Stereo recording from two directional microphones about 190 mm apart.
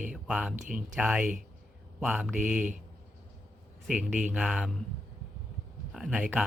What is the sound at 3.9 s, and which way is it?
Speech, 5° right (ahead or behind).